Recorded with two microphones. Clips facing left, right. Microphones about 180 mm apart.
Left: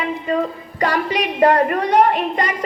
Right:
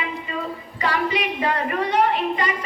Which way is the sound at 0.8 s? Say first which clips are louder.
Left 4 dB; 45° left (ahead or behind).